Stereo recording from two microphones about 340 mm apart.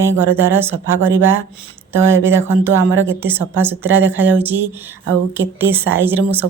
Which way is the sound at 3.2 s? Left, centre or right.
Centre.